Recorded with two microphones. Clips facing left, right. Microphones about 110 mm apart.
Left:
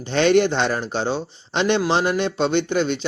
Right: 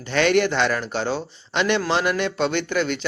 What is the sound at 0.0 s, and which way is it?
Speech, 25° left (ahead or behind).